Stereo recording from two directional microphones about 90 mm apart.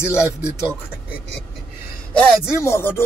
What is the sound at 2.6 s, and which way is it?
Speech, 30° left (ahead or behind).